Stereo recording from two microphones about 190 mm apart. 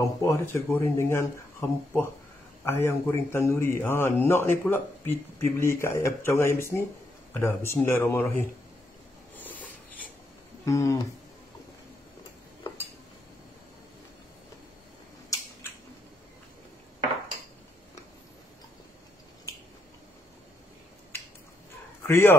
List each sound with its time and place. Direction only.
0.0 s a man's voice: 15° left (ahead or behind)
9.4 s writing: 10° left (ahead or behind)
10.6 s music: 15° left (ahead or behind)
15.2 s a sound: 15° left (ahead or behind)
22.0 s speech: 15° left (ahead or behind)